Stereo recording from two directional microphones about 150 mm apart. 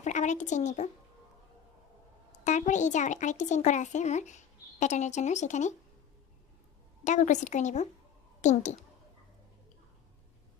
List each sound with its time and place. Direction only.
0.0 s speech: 55° left (ahead or behind)
2.4 s speech: 55° left (ahead or behind)
7.0 s speech: 55° left (ahead or behind)